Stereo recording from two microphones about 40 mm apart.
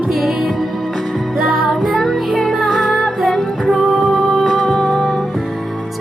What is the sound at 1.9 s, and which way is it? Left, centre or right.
Music, centre.